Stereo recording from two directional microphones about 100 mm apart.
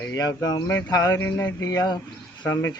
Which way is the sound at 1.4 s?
40° left (ahead or behind).